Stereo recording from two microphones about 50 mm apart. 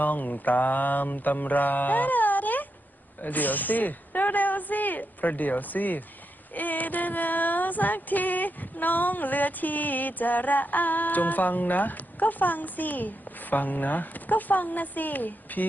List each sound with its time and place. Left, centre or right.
0.0 s female singing: left
3.2 s a woman's voice: left
6.5 s female singing: left